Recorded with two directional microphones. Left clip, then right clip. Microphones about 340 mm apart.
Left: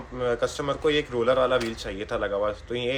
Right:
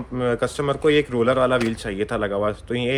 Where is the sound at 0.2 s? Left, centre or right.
Right.